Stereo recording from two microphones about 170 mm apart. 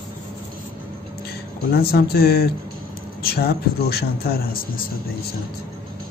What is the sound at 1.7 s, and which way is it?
Speech, 65° left (ahead or behind).